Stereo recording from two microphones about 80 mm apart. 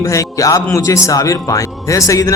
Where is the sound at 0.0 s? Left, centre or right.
Left.